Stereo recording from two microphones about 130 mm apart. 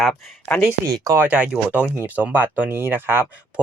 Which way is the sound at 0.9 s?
25° right (ahead or behind).